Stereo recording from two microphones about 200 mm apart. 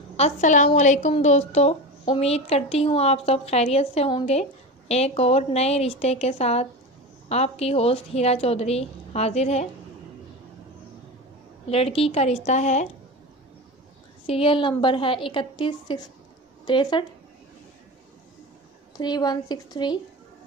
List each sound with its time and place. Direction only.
0.2 s a woman's voice: 40° left (ahead or behind)
11.7 s a woman's voice: 30° left (ahead or behind)
14.2 s a woman's voice: 30° left (ahead or behind)
18.9 s a woman's voice: 20° left (ahead or behind)